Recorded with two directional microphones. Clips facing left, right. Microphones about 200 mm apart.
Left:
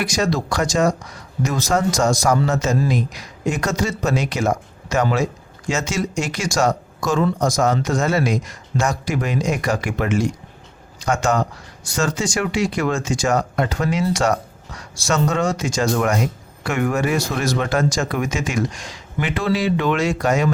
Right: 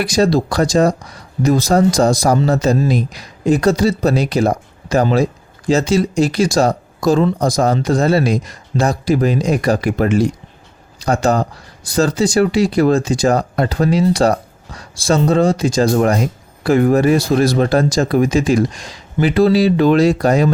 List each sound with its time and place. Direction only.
0.0 s speech: 35° right (ahead or behind)